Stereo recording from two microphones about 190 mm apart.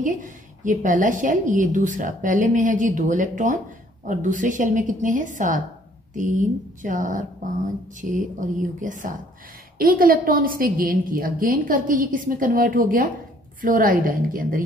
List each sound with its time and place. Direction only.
0.0 s a woman's voice: 40° right (ahead or behind)